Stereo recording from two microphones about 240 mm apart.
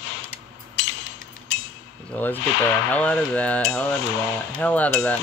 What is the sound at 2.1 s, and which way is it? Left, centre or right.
Speech, centre.